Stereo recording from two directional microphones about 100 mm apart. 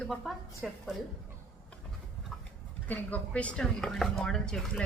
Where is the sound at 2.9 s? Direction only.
15° left (ahead or behind).